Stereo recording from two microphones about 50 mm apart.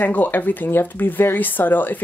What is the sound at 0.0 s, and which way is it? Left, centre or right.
Speech, left.